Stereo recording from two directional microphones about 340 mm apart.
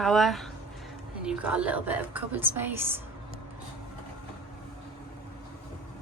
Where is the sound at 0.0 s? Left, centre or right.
Centre.